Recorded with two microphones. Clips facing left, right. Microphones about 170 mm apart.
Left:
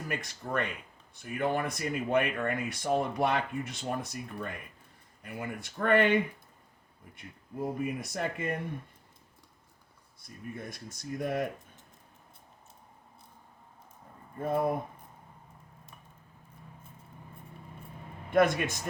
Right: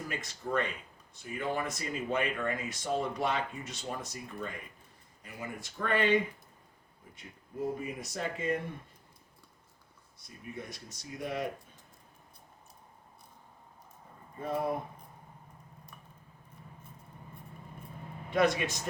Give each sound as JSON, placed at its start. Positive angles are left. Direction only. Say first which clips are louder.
{"t": 0.1, "sound": "speech", "louder": "left 1 dB", "side_deg": 60}
{"t": 7.6, "sound": "speech", "louder": "left 2 dB", "side_deg": 55}
{"t": 10.2, "sound": "speech", "louder": "left 2 dB", "side_deg": 50}
{"t": 14.3, "sound": "speech", "louder": "left 4 dB", "side_deg": 50}
{"t": 18.3, "sound": "speech", "louder": "left 3 dB", "side_deg": 50}